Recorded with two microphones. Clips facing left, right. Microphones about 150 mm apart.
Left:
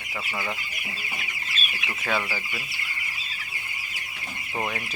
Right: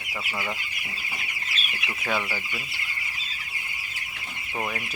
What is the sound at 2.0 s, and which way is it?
Speech, 5° right (ahead or behind).